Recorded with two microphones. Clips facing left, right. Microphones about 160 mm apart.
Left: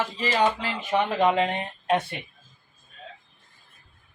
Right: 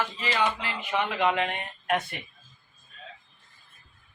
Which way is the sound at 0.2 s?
35° left (ahead or behind).